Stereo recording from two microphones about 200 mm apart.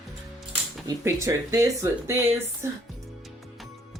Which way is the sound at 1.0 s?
15° right (ahead or behind).